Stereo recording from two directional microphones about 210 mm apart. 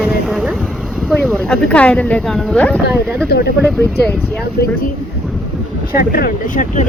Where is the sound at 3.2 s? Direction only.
50° left (ahead or behind).